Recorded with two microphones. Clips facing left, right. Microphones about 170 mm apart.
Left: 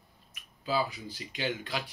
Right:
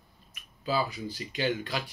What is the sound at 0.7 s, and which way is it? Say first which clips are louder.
Speech: right 1 dB; 15° left (ahead or behind).